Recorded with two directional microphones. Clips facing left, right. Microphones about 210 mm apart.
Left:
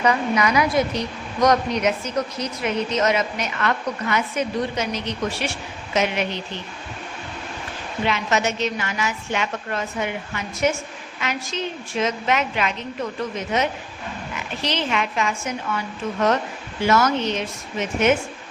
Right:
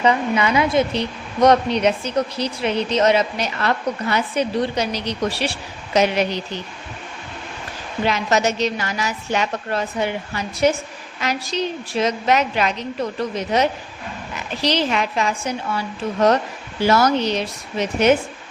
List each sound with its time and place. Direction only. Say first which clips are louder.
0.0 s a woman's voice: right 2 dB; 25° right (ahead or behind)
8.0 s a woman's voice: right 3 dB; 40° right (ahead or behind)